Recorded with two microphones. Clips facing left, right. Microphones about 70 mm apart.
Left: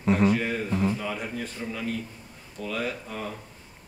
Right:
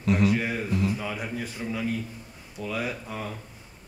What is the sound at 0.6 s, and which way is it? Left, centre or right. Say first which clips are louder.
Mantra: left 1 dB; left.